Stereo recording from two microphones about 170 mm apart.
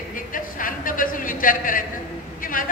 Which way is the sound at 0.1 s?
55° left (ahead or behind).